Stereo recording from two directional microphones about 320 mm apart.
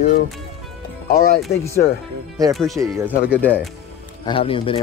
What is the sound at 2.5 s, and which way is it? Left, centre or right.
Speech, centre.